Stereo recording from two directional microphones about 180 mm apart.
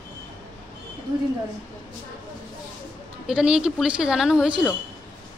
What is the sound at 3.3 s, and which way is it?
Speech, 5° right (ahead or behind).